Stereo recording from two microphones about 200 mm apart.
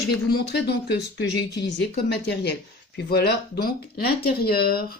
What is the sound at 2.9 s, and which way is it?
Speech, 55° left (ahead or behind).